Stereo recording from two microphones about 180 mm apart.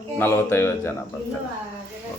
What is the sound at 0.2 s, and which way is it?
Speech, 15° left (ahead or behind).